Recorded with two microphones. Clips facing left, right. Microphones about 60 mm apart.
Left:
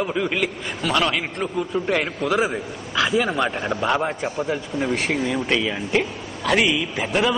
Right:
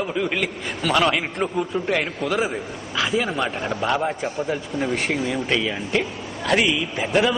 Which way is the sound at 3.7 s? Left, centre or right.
Centre.